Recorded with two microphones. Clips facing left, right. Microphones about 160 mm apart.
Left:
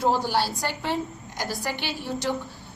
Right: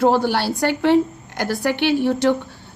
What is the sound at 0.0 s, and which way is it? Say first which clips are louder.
A woman's voice: right 6 dB; 65° right (ahead or behind).